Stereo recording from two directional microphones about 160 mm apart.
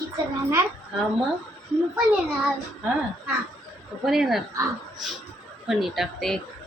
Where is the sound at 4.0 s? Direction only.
Centre (ahead or behind).